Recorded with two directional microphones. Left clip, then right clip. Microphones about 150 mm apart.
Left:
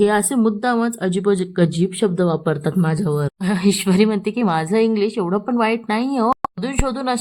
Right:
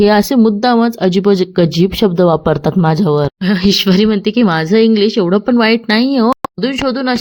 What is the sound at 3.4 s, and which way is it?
Speech, 15° right (ahead or behind).